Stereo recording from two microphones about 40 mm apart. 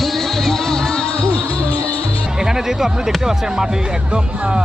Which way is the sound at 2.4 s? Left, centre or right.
Centre.